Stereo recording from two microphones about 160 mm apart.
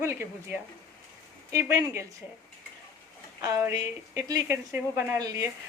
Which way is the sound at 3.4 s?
20° right (ahead or behind).